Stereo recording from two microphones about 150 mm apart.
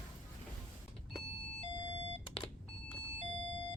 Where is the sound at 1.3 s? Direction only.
40° left (ahead or behind).